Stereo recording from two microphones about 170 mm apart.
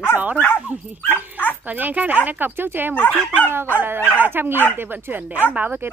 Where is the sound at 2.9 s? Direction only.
10° left (ahead or behind).